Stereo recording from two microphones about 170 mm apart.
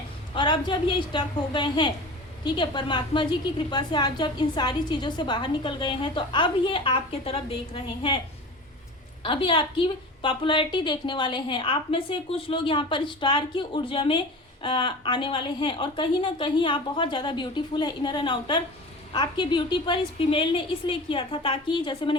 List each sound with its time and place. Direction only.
0.3 s a woman's voice: 30° left (ahead or behind)
9.2 s a woman's voice: 30° left (ahead or behind)